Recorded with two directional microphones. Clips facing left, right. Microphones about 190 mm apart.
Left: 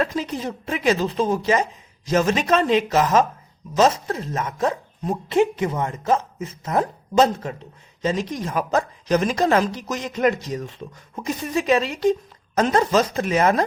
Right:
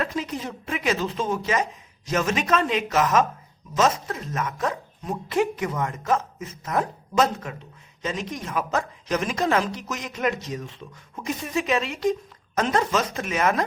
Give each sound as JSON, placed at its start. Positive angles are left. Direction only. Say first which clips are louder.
{"t": 0.0, "sound": "speech", "louder": "left 4 dB", "side_deg": 30}